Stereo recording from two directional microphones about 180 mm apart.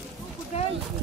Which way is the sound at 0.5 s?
35° left (ahead or behind).